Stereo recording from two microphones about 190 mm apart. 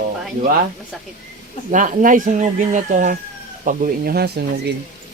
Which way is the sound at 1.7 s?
40° right (ahead or behind).